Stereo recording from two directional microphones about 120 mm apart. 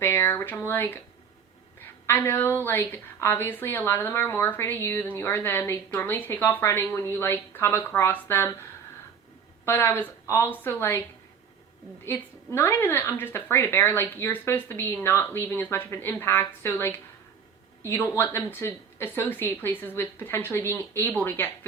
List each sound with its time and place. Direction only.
0.0 s a woman's voice: 20° left (ahead or behind)
9.6 s a woman's voice: 20° left (ahead or behind)
12.0 s a woman's voice: 20° left (ahead or behind)